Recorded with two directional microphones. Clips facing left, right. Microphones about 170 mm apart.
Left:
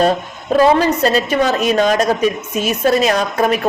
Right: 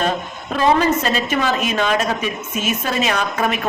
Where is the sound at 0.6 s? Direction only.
35° left (ahead or behind).